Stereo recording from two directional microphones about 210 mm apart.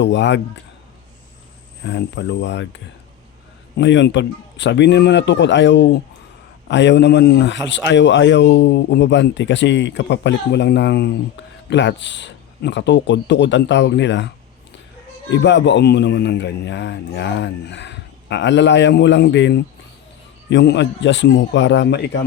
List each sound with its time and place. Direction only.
0.0 s speech: 60° left (ahead or behind)
1.8 s speech: 55° left (ahead or behind)
15.3 s speech: 55° left (ahead or behind)